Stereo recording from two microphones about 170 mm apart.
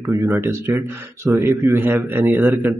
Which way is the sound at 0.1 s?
15° right (ahead or behind).